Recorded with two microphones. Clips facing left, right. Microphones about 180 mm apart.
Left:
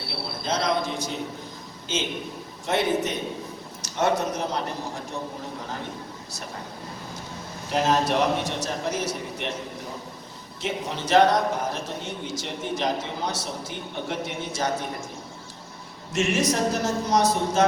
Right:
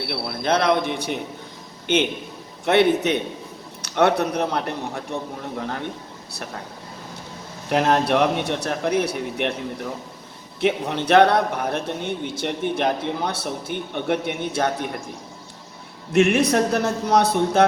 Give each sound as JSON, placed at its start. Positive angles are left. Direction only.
{"t": 0.1, "sound": "a man's voice", "side_deg": -65}
{"t": 7.7, "sound": "a man's voice", "side_deg": -60}
{"t": 10.6, "sound": "a man's voice", "side_deg": -60}
{"t": 16.1, "sound": "a man's voice", "side_deg": -60}